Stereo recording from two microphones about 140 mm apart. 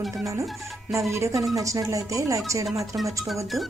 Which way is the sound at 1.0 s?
20° right (ahead or behind).